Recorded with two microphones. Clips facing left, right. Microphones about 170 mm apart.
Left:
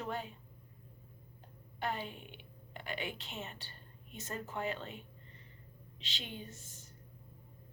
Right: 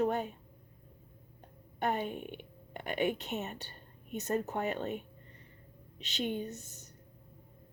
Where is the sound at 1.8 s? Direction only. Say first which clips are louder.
Right 6 dB; 55° right (ahead or behind).